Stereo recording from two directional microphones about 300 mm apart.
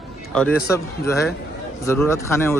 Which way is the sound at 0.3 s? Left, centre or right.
Centre.